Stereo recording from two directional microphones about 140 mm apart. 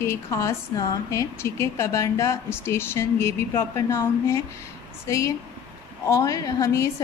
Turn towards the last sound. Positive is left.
turn(degrees=20)  # may be behind; listen again after turning